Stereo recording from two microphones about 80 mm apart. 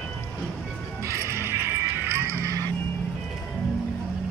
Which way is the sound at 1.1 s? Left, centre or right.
Right.